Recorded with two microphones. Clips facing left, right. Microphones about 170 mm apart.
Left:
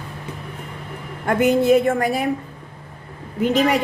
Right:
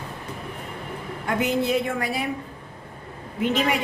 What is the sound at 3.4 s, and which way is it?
Speech, 40° left (ahead or behind).